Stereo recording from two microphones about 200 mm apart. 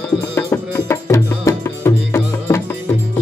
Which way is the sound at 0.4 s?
10° left (ahead or behind).